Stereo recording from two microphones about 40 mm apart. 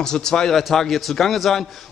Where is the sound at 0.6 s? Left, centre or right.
Centre.